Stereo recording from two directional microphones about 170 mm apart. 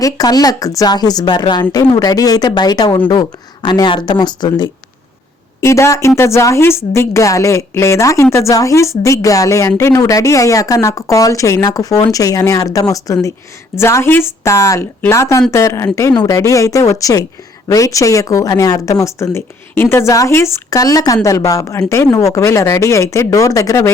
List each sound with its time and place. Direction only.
0.0 s speech: 20° left (ahead or behind)